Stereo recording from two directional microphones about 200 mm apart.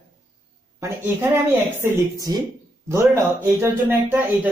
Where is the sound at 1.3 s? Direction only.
10° right (ahead or behind).